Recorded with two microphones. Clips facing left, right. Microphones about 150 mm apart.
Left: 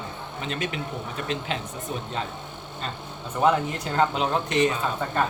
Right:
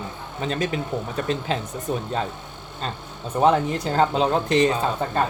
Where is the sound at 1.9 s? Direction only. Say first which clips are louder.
Right 7 dB; 40° right (ahead or behind).